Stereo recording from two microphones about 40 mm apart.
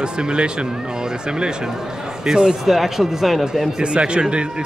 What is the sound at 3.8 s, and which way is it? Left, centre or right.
Speech, right.